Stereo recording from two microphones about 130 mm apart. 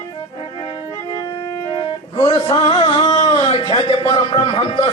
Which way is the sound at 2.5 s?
40° left (ahead or behind).